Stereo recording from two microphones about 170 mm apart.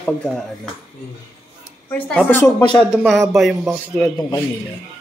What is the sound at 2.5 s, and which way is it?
Speech, 25° left (ahead or behind).